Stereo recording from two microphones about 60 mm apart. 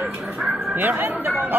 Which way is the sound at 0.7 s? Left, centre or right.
Right.